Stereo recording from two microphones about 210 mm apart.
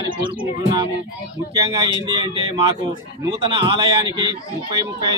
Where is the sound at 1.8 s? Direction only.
25° right (ahead or behind).